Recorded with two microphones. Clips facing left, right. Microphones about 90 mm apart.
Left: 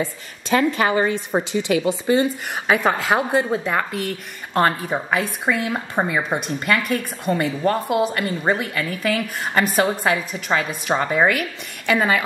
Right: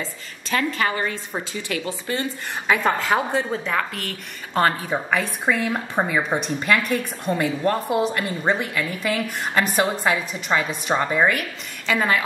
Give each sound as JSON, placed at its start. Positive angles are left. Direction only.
{"t": 0.0, "sound": "a woman's voice", "side_deg": 20}